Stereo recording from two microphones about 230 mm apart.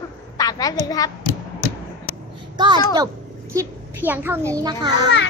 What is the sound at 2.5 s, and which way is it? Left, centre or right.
Speech, centre.